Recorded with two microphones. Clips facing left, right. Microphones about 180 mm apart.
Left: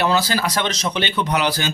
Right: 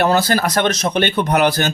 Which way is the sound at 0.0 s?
50° right (ahead or behind).